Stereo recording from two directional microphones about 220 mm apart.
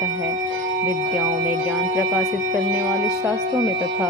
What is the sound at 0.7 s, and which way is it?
Speech, 45° right (ahead or behind).